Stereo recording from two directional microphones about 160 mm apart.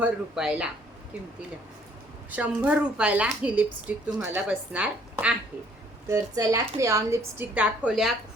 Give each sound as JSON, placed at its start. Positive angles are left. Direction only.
{"t": 0.0, "sound": "speech", "side_deg": -5}
{"t": 2.3, "sound": "a woman's voice", "side_deg": -10}
{"t": 6.1, "sound": "a woman's voice", "side_deg": -20}